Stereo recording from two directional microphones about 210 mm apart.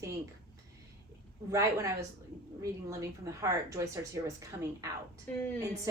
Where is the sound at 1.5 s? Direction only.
15° right (ahead or behind).